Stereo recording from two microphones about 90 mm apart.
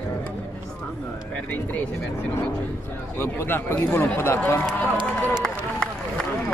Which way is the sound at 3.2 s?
25° left (ahead or behind).